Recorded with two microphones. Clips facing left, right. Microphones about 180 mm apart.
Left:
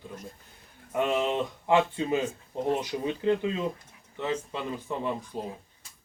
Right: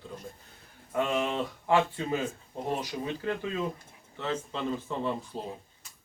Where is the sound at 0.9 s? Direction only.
20° left (ahead or behind).